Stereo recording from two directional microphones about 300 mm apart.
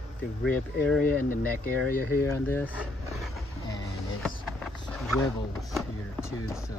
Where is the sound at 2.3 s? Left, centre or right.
Centre.